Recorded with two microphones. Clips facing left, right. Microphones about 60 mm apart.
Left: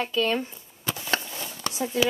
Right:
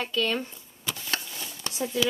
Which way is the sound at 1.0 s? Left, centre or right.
Left.